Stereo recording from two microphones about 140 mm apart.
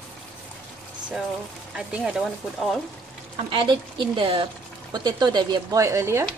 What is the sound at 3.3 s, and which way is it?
Speech, 40° right (ahead or behind).